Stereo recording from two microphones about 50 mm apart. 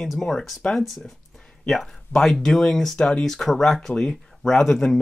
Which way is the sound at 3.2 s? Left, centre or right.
Centre.